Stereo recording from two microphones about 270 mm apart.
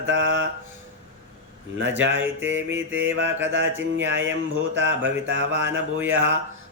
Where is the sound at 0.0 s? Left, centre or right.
Right.